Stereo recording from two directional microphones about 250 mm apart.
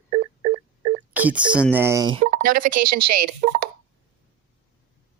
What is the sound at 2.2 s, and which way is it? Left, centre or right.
Speech, right.